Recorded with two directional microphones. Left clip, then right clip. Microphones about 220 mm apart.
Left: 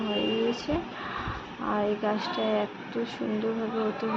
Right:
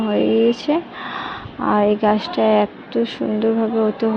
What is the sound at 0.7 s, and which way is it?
A woman's voice, 30° right (ahead or behind).